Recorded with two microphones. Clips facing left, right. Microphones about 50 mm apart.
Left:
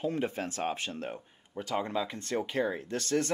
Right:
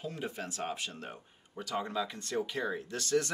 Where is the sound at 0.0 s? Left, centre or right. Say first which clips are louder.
Left 7 dB; left.